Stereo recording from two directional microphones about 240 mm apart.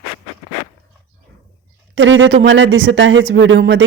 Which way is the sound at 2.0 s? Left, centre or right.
Right.